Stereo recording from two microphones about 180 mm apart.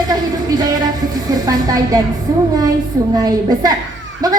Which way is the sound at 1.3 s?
20° right (ahead or behind).